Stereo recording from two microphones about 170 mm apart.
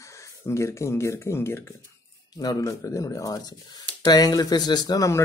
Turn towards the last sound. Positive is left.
turn(degrees=20)  # may be behind; listen again after turning